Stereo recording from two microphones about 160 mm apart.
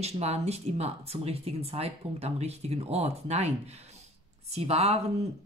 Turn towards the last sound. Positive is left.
turn(degrees=-40)  # may be behind; listen again after turning